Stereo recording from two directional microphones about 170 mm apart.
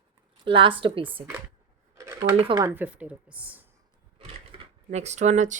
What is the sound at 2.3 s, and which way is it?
Speech, 30° right (ahead or behind).